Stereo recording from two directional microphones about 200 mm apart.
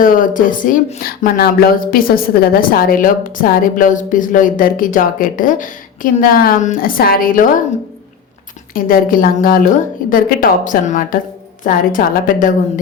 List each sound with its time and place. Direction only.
0.0 s speech: 45° left (ahead or behind)
8.7 s a woman's voice: 45° left (ahead or behind)